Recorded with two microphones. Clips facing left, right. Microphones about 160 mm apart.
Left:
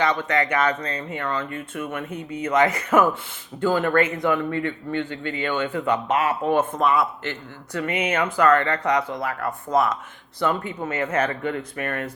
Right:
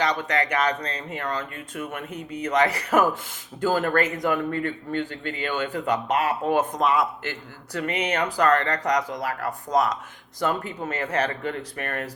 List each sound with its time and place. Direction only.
0.3 s a man's voice: 35° right (ahead or behind)